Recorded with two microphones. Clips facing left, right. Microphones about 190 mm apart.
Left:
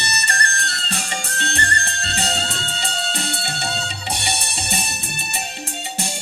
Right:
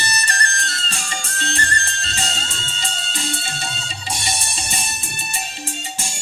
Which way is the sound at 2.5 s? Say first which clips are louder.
Left 4 dB; 65° left (ahead or behind).